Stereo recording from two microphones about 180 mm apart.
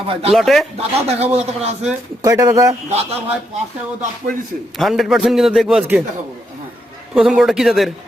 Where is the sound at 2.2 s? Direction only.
15° right (ahead or behind).